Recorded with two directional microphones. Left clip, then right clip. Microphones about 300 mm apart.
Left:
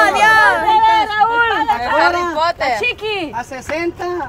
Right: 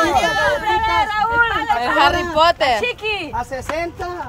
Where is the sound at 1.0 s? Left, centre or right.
Centre.